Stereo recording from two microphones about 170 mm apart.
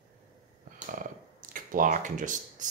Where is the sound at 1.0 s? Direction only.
55° right (ahead or behind).